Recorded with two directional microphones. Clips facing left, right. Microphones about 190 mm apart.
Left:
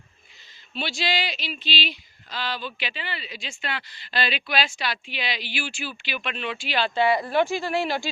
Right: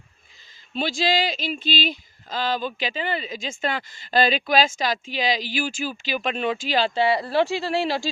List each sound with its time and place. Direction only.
0.7 s speech: 40° right (ahead or behind)